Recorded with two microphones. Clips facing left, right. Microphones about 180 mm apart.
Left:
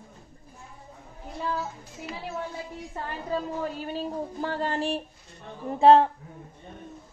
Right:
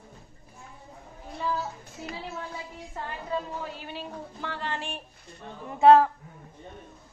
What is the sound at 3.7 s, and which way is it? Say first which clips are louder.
A woman's voice: left 7 dB; 40° left (ahead or behind).